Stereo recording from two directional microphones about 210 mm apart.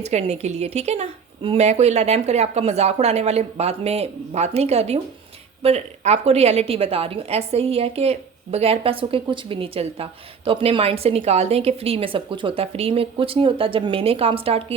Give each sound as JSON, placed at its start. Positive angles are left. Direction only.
{"t": 0.0, "sound": "a woman's voice", "side_deg": -30}